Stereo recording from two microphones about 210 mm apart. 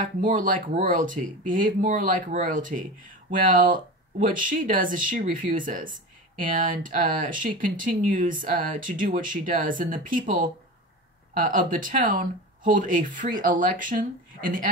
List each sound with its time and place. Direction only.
0.0 s speech: 40° right (ahead or behind)